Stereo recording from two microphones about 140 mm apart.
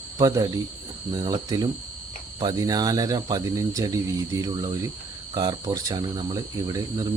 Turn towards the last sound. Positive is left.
turn(degrees=-25)  # may be behind; listen again after turning